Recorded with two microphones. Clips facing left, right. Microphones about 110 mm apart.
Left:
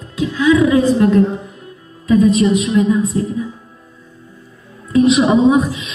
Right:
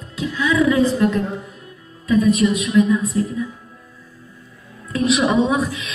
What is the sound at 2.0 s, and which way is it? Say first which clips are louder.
A woman's voice: left 4 dB; 25° left (ahead or behind).